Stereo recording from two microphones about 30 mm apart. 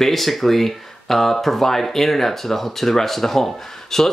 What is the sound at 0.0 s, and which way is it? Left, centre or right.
Speech, centre.